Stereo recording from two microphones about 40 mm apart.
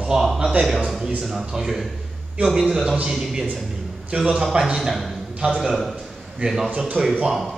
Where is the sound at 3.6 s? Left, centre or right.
Centre.